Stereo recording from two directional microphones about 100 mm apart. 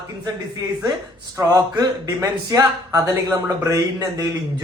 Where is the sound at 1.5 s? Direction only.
35° right (ahead or behind).